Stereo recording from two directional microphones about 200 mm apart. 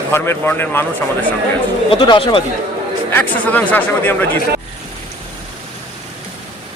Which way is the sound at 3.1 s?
10° left (ahead or behind).